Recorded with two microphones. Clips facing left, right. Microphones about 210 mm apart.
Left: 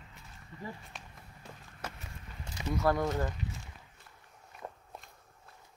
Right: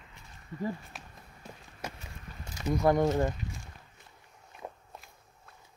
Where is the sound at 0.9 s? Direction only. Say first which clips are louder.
Right 1 dB; 5° right (ahead or behind).